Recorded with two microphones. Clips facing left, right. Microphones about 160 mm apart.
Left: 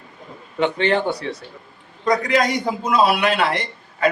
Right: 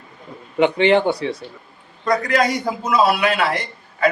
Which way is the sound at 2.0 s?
5° right (ahead or behind).